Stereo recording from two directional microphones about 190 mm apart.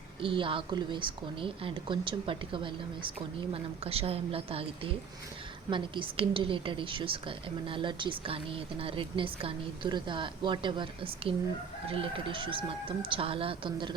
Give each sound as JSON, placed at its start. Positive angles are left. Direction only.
{"t": 0.2, "sound": "a woman's voice", "side_deg": -25}